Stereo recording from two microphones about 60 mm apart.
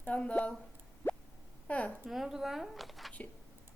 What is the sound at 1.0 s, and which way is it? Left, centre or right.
Plop, left.